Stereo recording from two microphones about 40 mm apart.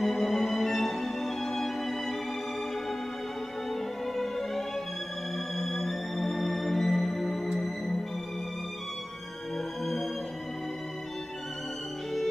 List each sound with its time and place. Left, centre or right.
0.0 s music: centre
4.2 s music: centre